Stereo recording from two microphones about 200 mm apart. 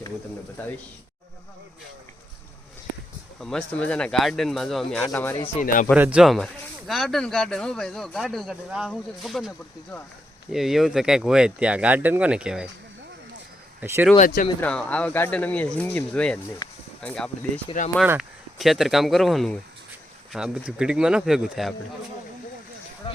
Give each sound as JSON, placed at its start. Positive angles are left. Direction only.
{"t": 3.4, "sound": "speech", "side_deg": 5}
{"t": 5.6, "sound": "speech", "side_deg": 40}
{"t": 5.9, "sound": "speech", "side_deg": -5}
{"t": 10.5, "sound": "speech", "side_deg": 0}
{"t": 13.8, "sound": "speech", "side_deg": -15}
{"t": 14.2, "sound": "speech", "side_deg": 45}
{"t": 14.6, "sound": "speech", "side_deg": 5}
{"t": 16.6, "sound": "a sound", "side_deg": 20}
{"t": 17.0, "sound": "speech", "side_deg": 5}
{"t": 18.0, "sound": "speech", "side_deg": -5}